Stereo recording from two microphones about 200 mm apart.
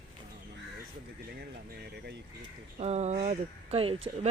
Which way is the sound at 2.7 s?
35° right (ahead or behind).